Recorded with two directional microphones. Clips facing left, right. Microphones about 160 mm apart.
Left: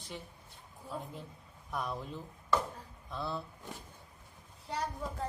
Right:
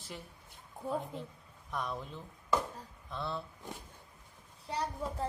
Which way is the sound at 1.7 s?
Centre (ahead or behind).